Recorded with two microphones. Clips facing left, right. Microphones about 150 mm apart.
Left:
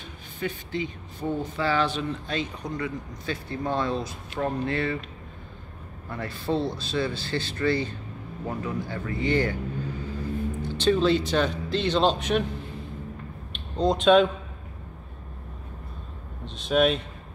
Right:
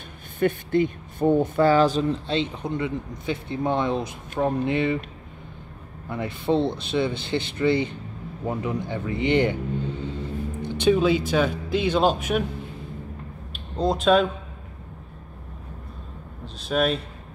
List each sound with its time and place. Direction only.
0.4 s speech: 55° right (ahead or behind); by 4.9 s 20° right (ahead or behind)
6.0 s speech: 20° right (ahead or behind)
10.6 s speech: 15° right (ahead or behind)
13.5 s a sound: 5° right (ahead or behind)
16.4 s speech: centre (ahead or behind)